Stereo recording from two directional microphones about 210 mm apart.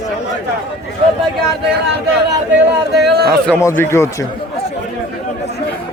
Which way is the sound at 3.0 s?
50° right (ahead or behind).